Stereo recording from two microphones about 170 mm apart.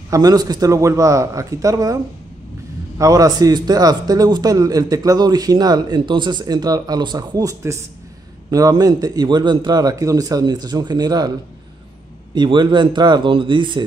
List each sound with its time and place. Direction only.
0.1 s a man's voice: 20° right (ahead or behind)
3.0 s a man's voice: 20° right (ahead or behind)
12.4 s a man's voice: 25° right (ahead or behind)